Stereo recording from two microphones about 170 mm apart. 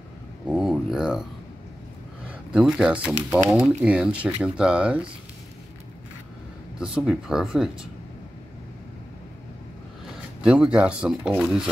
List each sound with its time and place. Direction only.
0.5 s a sound: centre (ahead or behind)
2.2 s speech: 5° right (ahead or behind)
6.8 s speech: 5° right (ahead or behind)
10.4 s speech: 5° right (ahead or behind)